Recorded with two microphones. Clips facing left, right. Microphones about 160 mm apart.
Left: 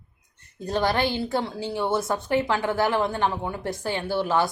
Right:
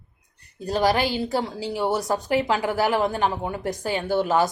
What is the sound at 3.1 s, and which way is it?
A woman's voice, 15° right (ahead or behind).